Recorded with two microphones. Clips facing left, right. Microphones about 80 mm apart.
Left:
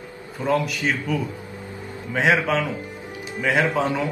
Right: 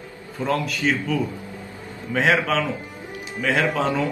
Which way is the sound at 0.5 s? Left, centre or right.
Left.